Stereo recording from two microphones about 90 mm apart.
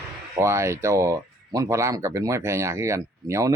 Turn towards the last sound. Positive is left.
turn(degrees=-35)  # may be behind; listen again after turning